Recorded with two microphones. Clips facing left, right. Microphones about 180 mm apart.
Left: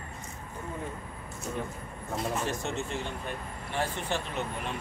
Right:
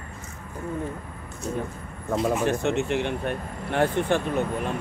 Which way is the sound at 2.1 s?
70° right (ahead or behind).